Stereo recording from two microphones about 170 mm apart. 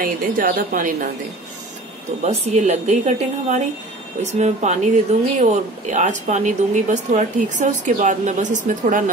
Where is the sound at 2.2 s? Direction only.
40° right (ahead or behind).